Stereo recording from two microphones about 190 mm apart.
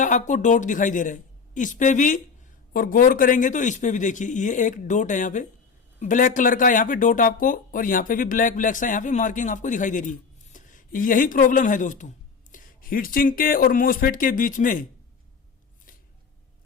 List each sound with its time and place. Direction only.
0.0 s speech: 40° left (ahead or behind)